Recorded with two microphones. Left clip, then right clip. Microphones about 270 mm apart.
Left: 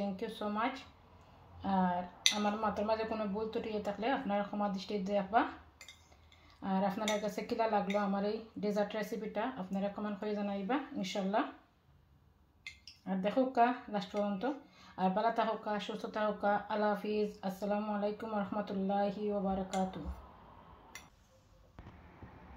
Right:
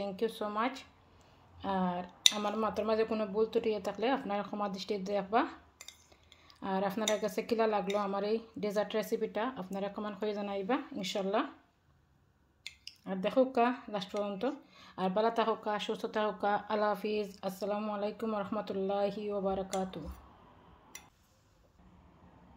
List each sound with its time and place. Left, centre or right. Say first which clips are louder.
0.0 s speech: right 4 dB; right
6.6 s speech: right 2 dB; right
12.8 s speech: right 1 dB; right